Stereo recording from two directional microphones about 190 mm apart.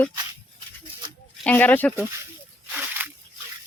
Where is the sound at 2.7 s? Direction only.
10° right (ahead or behind).